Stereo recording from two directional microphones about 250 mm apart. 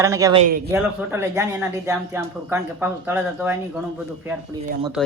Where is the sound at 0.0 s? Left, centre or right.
Centre.